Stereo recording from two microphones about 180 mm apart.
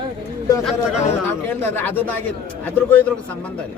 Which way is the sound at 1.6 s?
10° left (ahead or behind).